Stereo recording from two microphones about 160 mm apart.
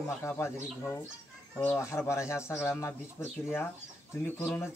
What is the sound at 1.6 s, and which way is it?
Speech, 15° left (ahead or behind).